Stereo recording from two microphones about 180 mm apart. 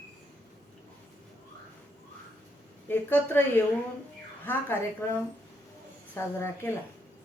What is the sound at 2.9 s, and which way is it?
A woman's voice, 10° left (ahead or behind).